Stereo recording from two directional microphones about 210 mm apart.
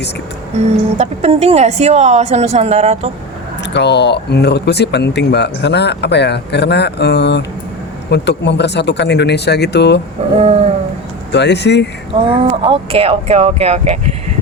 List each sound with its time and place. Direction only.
0.9 s a woman's voice: 30° right (ahead or behind)
3.7 s speech: 55° left (ahead or behind)
10.2 s a woman's voice: 30° right (ahead or behind)
11.3 s speech: 55° left (ahead or behind)
12.1 s speech: 25° right (ahead or behind)